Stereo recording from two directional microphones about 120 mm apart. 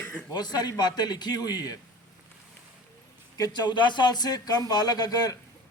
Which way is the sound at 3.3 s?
30° left (ahead or behind).